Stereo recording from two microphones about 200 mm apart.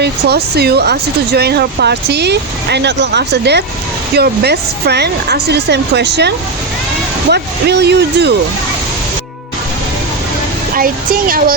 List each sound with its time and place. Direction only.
0.0 s speech: 55° right (ahead or behind)
10.8 s speech: 45° right (ahead or behind)